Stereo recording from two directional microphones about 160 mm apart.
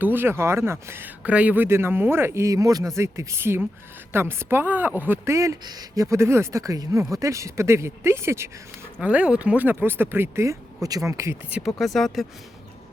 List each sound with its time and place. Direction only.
0.0 s speech: 15° right (ahead or behind)
11.5 s speech: centre (ahead or behind)